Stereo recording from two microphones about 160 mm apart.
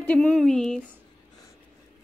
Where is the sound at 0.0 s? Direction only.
5° left (ahead or behind).